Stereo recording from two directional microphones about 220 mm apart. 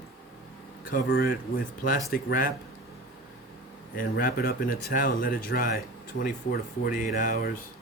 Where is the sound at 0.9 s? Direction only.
40° left (ahead or behind).